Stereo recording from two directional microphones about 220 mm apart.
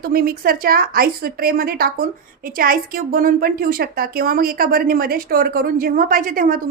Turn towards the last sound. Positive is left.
turn(degrees=-40)  # may be behind; listen again after turning